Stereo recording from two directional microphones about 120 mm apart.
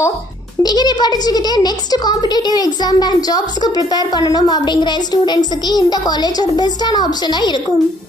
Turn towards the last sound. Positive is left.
turn(degrees=35)  # may be behind; listen again after turning